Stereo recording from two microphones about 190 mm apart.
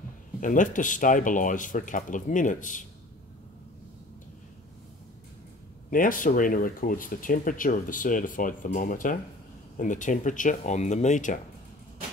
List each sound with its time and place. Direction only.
0.4 s speech: 45° left (ahead or behind)
5.9 s speech: 45° left (ahead or behind)